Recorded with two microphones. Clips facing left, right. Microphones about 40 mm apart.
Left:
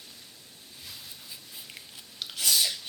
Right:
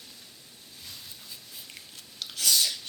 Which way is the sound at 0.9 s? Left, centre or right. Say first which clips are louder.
Even; centre.